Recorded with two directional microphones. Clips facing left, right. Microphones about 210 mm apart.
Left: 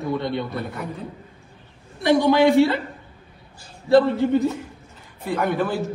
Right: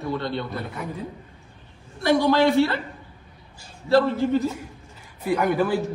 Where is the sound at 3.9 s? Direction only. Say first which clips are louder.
Left 3 dB; 20° left (ahead or behind).